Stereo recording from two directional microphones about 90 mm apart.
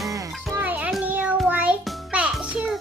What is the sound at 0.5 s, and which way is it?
Music, 20° right (ahead or behind).